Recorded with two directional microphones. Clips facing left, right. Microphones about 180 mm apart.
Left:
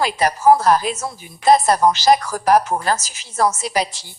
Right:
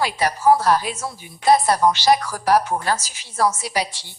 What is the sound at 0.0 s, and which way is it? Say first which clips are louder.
A woman's voice: left 3 dB; 45° left (ahead or behind).